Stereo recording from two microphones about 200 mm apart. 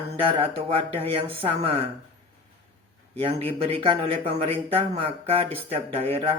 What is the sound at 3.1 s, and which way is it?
Speech, 30° right (ahead or behind).